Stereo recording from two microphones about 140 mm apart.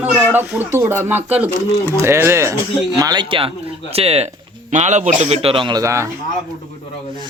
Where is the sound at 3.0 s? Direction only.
30° right (ahead or behind).